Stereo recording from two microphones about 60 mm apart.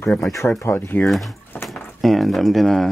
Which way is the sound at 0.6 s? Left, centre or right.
Left.